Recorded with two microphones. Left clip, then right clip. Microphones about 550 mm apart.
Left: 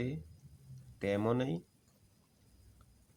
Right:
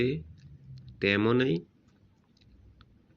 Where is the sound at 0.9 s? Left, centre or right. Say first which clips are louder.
Right 8 dB; left.